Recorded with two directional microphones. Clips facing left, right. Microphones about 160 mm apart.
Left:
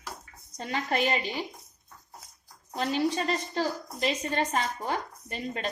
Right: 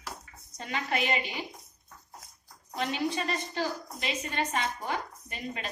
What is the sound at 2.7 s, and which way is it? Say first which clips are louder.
A woman's voice: left 3 dB; 35° left (ahead or behind).